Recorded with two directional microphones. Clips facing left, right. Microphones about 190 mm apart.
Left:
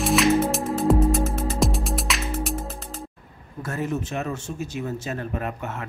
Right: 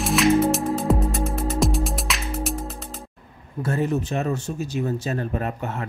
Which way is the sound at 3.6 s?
30° right (ahead or behind).